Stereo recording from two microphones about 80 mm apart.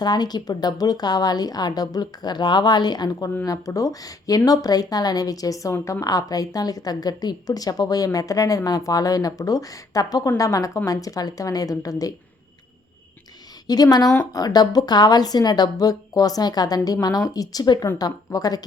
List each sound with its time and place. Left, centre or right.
0.0 s a woman's voice: left
3.7 s a woman's voice: left
13.7 s a woman's voice: left